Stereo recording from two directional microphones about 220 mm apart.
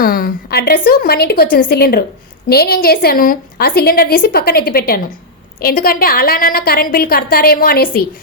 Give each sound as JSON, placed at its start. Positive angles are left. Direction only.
{"t": 0.0, "sound": "a woman's voice", "side_deg": 40}